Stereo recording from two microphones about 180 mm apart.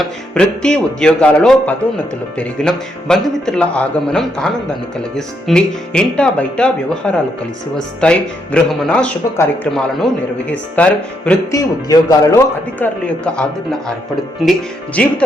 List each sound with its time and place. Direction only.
0.0 s speech: 5° left (ahead or behind)
11.5 s a man's voice: 20° left (ahead or behind)
12.8 s speech: 5° left (ahead or behind)
15.0 s speech: 5° left (ahead or behind)